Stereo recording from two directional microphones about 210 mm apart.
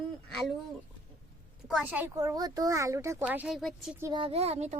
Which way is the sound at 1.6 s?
5° right (ahead or behind).